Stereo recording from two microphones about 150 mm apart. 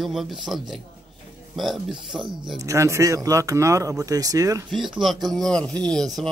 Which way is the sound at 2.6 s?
20° right (ahead or behind).